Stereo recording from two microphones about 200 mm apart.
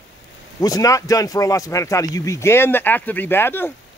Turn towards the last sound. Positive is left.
turn(degrees=10)  # may be behind; listen again after turning